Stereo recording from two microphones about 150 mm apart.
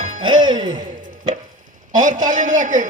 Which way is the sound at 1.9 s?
55° right (ahead or behind).